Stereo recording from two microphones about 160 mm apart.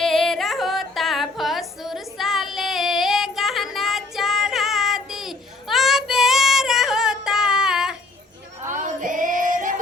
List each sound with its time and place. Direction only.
0.0 s singing: 5° left (ahead or behind)
8.6 s female singing: 55° right (ahead or behind)